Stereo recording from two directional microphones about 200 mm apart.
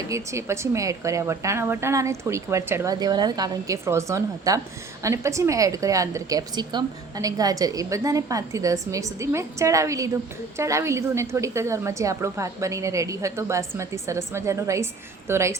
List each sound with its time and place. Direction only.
0.1 s a woman's voice: 15° right (ahead or behind)